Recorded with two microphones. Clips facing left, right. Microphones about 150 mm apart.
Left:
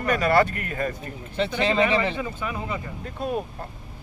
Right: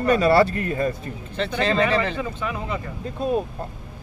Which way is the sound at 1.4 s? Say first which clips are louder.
Even; 5° left (ahead or behind).